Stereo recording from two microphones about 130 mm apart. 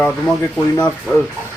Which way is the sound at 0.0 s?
5° left (ahead or behind).